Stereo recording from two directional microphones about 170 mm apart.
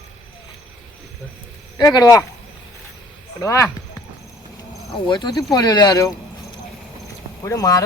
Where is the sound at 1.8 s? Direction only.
25° left (ahead or behind).